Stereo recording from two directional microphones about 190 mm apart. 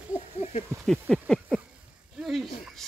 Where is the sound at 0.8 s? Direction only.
Centre (ahead or behind).